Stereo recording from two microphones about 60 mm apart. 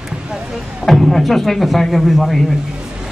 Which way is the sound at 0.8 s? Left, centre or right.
Centre.